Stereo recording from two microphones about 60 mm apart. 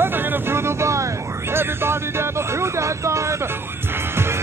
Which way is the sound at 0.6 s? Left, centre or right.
Right.